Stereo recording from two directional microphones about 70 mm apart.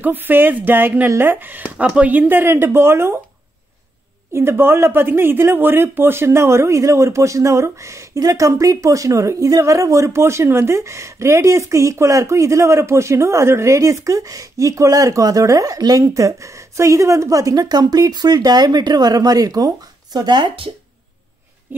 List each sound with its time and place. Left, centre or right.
0.0 s speech: right
4.3 s speech: right